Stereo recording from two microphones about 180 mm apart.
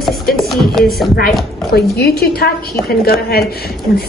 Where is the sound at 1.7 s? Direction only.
60° left (ahead or behind).